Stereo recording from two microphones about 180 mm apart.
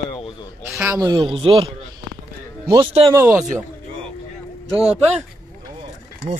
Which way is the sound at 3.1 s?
15° right (ahead or behind).